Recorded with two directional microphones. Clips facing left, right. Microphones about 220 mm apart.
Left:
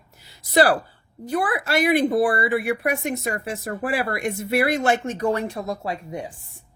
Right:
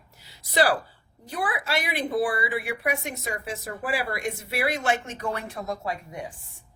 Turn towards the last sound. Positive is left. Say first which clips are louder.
# left 3 dB
turn(degrees=30)  # may be behind; listen again after turning